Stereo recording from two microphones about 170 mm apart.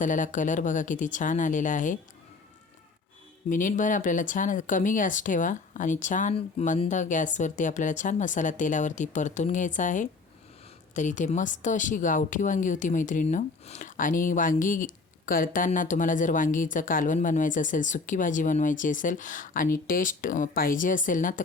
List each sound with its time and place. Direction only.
0.0 s a woman's voice: 50° left (ahead or behind)
3.5 s a woman's voice: 50° left (ahead or behind)
6.3 s a woman's voice: 40° left (ahead or behind)